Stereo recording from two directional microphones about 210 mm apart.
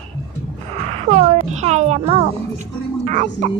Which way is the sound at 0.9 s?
30° right (ahead or behind).